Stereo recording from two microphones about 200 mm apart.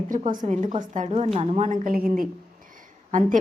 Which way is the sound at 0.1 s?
40° right (ahead or behind).